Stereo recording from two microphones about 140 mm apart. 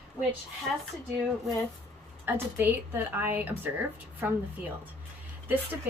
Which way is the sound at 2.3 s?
15° right (ahead or behind).